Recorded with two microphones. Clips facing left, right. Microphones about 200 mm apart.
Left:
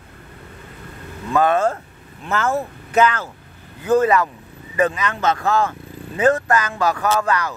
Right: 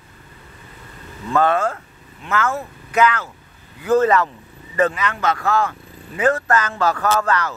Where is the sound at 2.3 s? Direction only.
35° left (ahead or behind).